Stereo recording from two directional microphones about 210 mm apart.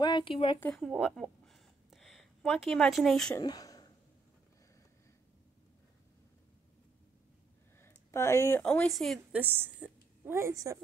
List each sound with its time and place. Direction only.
0.0 s speech: 20° left (ahead or behind)
0.6 s speech: 5° left (ahead or behind)
3.3 s speech: 15° left (ahead or behind)
7.8 s speech: 10° left (ahead or behind); by 10.8 s 15° right (ahead or behind)